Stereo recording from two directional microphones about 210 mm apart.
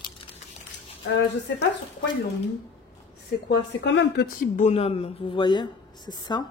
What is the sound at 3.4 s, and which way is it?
Speech, 55° left (ahead or behind).